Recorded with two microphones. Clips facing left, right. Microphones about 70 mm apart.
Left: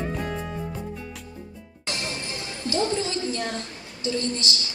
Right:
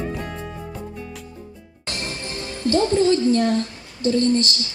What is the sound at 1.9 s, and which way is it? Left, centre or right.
A woman's voice, right.